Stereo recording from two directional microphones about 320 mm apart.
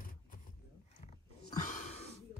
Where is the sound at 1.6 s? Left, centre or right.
Left.